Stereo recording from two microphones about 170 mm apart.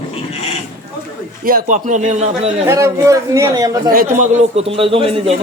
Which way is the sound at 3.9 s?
50° right (ahead or behind).